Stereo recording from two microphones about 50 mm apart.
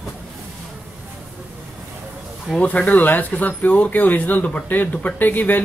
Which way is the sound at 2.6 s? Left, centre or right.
Left.